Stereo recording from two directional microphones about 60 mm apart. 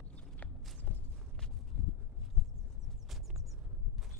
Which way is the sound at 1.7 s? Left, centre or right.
Centre.